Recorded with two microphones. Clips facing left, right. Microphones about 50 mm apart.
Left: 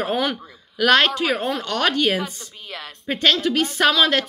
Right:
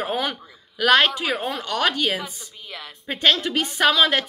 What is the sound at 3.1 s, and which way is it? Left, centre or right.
A woman's voice, centre.